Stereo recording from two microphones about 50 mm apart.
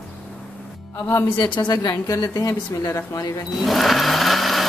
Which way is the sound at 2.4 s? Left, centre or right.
Left.